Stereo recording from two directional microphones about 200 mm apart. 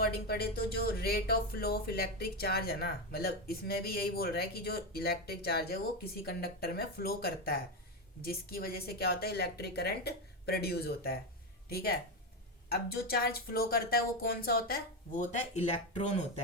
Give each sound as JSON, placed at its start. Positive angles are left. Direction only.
{"t": 0.0, "sound": "speech", "side_deg": 50}